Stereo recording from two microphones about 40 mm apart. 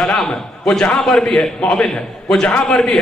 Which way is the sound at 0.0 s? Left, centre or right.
Centre.